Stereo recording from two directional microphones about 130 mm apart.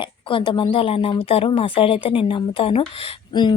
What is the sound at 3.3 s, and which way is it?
Speech, 35° left (ahead or behind).